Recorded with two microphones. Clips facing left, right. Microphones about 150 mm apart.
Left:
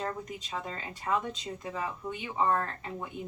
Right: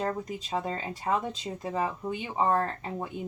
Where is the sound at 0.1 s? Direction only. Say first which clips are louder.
Right 5 dB; 35° right (ahead or behind).